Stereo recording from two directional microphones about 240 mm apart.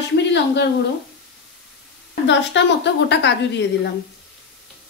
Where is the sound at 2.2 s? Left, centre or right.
Left.